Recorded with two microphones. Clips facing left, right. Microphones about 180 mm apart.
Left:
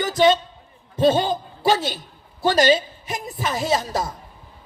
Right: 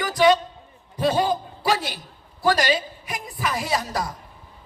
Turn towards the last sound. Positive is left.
turn(degrees=25)  # may be behind; listen again after turning